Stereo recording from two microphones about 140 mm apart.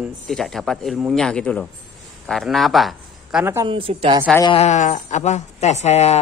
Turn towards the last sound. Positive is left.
turn(degrees=50)  # may be behind; listen again after turning